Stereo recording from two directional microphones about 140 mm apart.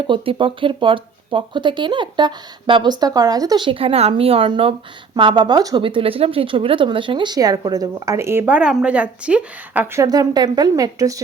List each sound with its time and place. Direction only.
0.1 s speech: 35° right (ahead or behind); by 10.0 s 10° right (ahead or behind)
10.0 s speech: 25° right (ahead or behind)